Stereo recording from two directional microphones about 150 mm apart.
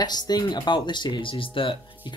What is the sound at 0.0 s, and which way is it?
Speech, 25° left (ahead or behind).